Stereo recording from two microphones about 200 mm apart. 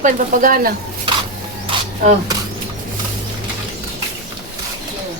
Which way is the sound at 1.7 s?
25° right (ahead or behind).